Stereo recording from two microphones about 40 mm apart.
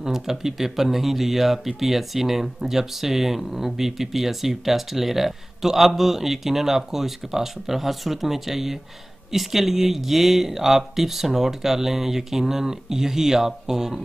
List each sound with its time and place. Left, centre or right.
0.0 s speech: centre